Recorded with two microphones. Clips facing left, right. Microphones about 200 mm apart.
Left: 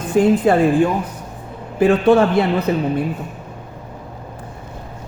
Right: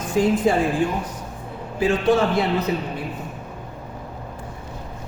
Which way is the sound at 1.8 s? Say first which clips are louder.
Left 6 dB; 60° left (ahead or behind).